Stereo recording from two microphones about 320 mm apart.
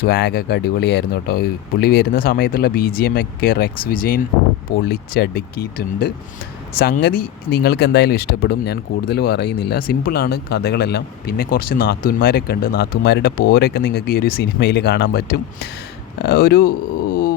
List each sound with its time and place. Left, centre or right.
0.0 s speech: left